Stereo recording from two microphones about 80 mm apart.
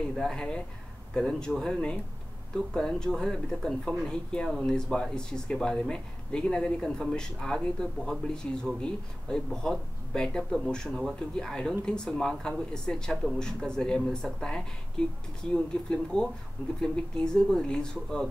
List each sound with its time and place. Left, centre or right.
0.1 s speech: centre